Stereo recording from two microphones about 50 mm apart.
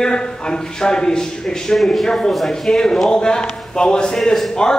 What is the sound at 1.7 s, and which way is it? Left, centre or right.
Speech, centre.